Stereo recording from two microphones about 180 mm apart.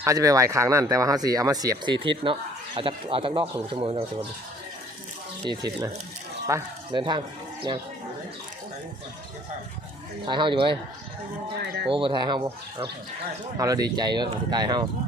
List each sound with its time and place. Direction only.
0.0 s speech: 20° right (ahead or behind)
5.5 s speech: 20° right (ahead or behind)
10.2 s speech: 25° right (ahead or behind)
11.6 s speech: 70° right (ahead or behind)
11.9 s speech: 30° right (ahead or behind)
13.6 s speech: 20° right (ahead or behind)